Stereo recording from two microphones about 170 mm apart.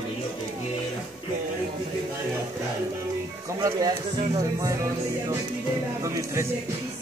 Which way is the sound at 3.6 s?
20° right (ahead or behind).